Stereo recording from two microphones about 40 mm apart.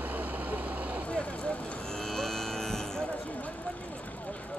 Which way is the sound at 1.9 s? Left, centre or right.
Centre.